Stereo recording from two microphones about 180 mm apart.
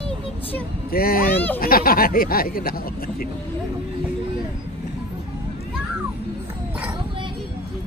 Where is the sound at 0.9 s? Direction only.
55° left (ahead or behind).